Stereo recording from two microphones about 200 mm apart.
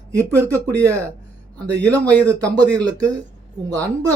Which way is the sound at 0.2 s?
15° right (ahead or behind).